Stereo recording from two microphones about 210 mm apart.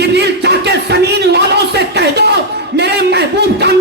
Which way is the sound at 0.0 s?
50° right (ahead or behind).